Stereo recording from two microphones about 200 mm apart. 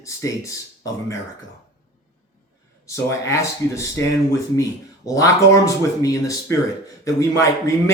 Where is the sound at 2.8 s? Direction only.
15° left (ahead or behind).